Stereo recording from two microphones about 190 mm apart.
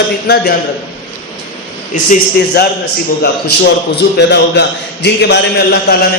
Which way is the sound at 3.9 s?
65° left (ahead or behind).